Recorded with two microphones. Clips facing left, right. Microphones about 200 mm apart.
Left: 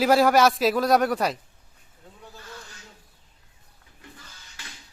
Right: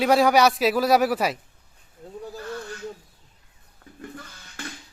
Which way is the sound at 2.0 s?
40° right (ahead or behind).